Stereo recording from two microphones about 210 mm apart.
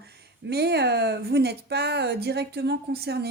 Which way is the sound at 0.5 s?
50° right (ahead or behind).